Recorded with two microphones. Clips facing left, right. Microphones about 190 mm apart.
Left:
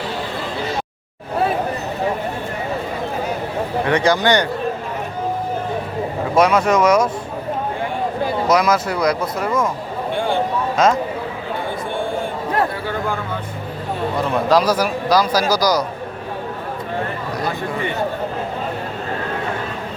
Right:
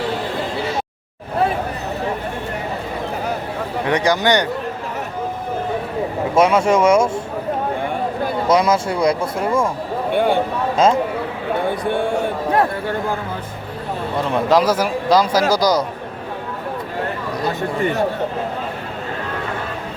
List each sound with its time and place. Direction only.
3.8 s speech: 15° right (ahead or behind)
6.3 s speech: 25° right (ahead or behind)
8.4 s speech: 30° right (ahead or behind)
10.1 s a sound: 60° right (ahead or behind)
10.8 s speech: 30° right (ahead or behind)
14.5 s speech: 25° right (ahead or behind)